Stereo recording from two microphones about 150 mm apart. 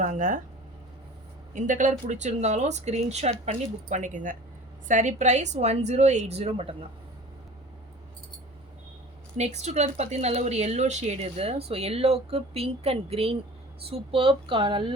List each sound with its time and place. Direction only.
0.0 s speech: 60° right (ahead or behind)
1.5 s speech: 60° right (ahead or behind)
3.8 s speech: 55° right (ahead or behind); by 6.7 s 40° right (ahead or behind)
9.4 s speech: 50° right (ahead or behind)